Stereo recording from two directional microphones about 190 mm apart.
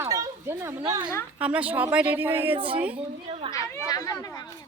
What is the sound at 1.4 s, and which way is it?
Speech, 5° right (ahead or behind).